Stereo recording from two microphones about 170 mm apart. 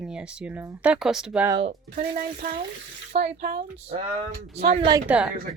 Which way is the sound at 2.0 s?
60° right (ahead or behind).